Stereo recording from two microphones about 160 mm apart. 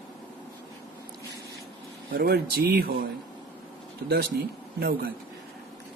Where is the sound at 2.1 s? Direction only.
75° right (ahead or behind).